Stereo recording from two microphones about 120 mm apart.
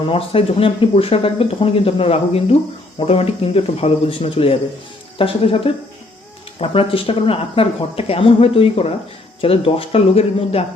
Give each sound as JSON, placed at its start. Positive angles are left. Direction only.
{"t": 0.1, "sound": "speech", "side_deg": 50}